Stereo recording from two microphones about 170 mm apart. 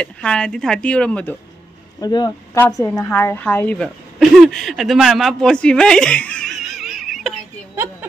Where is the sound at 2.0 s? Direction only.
20° left (ahead or behind); by 7.3 s centre (ahead or behind).